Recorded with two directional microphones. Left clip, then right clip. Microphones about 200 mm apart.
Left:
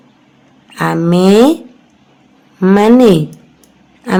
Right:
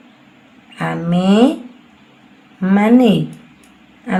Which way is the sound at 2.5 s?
35° left (ahead or behind).